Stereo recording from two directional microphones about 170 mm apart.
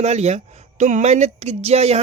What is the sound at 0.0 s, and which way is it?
Speech, 40° right (ahead or behind).